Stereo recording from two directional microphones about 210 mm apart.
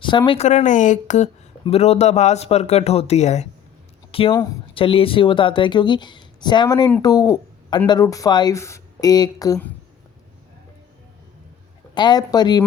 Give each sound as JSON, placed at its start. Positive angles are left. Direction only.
{"t": 0.0, "sound": "a woman's voice", "side_deg": 20}
{"t": 11.9, "sound": "a woman's voice", "side_deg": 20}